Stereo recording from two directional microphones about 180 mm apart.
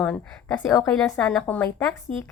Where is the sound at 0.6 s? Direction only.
15° left (ahead or behind).